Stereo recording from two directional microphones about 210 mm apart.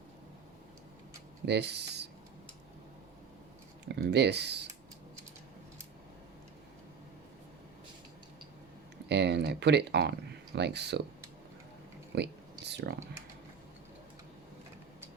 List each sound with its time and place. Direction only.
1.5 s speech: 55° right (ahead or behind)
3.9 s speech: 55° right (ahead or behind)
9.0 s speech: 55° right (ahead or behind)
12.1 s a sound: 50° right (ahead or behind)